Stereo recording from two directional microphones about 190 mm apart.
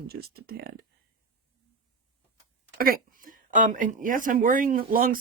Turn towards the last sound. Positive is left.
turn(degrees=-50)  # may be behind; listen again after turning